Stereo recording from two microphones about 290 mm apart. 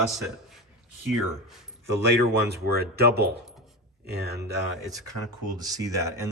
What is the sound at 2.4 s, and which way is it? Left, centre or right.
Speech, right.